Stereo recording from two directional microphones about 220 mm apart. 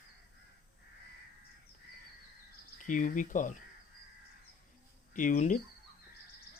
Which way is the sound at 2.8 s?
35° left (ahead or behind).